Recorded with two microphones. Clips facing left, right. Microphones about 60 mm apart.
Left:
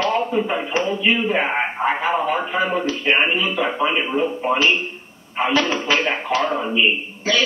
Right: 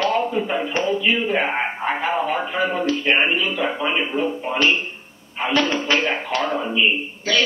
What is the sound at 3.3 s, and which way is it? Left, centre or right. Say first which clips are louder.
Speech: left 1 dB; centre.